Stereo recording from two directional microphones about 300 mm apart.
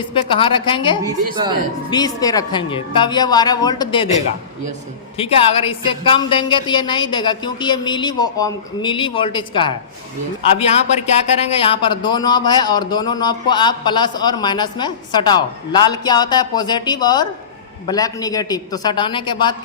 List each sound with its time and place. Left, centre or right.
0.1 s speech: centre
5.1 s speech: centre